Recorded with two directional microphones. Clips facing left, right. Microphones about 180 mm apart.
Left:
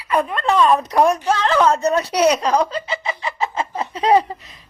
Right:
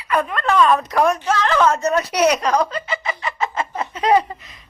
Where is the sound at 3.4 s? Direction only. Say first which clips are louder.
Left 1 dB; 30° left (ahead or behind).